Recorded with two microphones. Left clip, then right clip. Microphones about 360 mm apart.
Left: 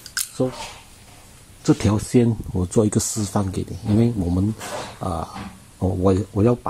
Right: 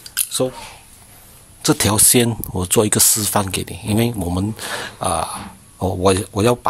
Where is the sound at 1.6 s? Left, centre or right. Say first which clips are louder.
Right 4 dB; right.